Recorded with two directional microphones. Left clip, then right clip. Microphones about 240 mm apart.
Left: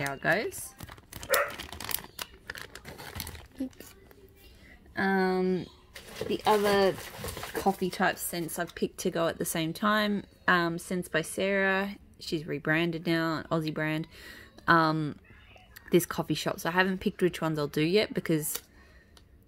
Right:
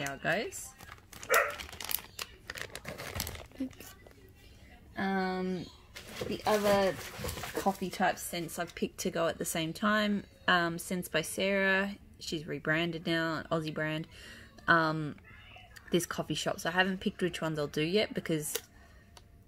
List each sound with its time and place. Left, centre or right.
0.0 s speech: left
2.8 s typing: centre
4.9 s speech: left
7.6 s speech: left